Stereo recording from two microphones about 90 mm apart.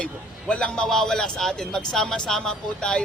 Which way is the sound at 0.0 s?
10° left (ahead or behind).